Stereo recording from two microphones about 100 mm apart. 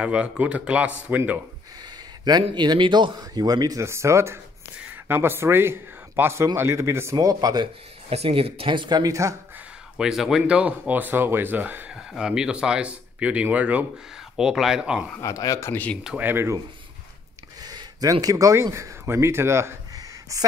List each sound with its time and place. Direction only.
0.0 s speech: 10° right (ahead or behind)
2.2 s speech: 45° right (ahead or behind)
3.8 s a man's voice: 30° right (ahead or behind)
8.1 s speech: 80° right; by 9.3 s 35° right (ahead or behind)
9.9 s speech: 5° right (ahead or behind)
11.9 s speech: 5° right (ahead or behind)
14.3 s speech: 5° right (ahead or behind)
15.1 s speech: 35° left (ahead or behind)
16.2 s a man's voice: 20° right (ahead or behind)
17.6 s a sound: 40° right (ahead or behind)
18.2 s a man's voice: 35° right (ahead or behind)
20.0 s a sound: 40° right (ahead or behind)